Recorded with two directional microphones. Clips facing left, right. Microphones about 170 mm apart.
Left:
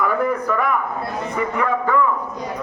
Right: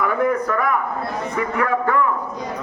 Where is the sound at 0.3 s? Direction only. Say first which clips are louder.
Right 1 dB; 10° left (ahead or behind).